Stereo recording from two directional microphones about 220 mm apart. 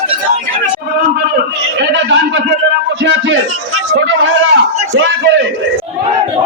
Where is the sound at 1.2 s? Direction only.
50° right (ahead or behind).